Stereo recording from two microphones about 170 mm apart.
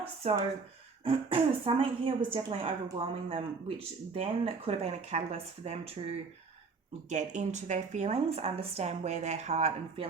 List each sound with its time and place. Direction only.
0.0 s speech: 35° right (ahead or behind)